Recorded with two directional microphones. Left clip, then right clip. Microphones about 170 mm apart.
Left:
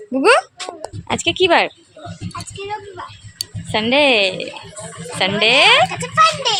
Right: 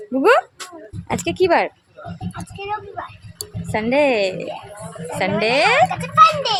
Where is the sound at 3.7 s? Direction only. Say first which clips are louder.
Left 3 dB; centre (ahead or behind).